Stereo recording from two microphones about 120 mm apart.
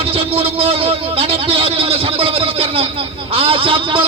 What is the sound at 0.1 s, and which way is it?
Speech, 50° right (ahead or behind).